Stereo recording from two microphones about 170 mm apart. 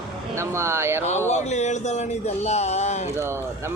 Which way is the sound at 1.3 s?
40° left (ahead or behind).